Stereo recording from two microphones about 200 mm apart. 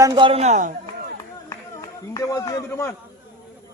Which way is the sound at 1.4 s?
15° left (ahead or behind).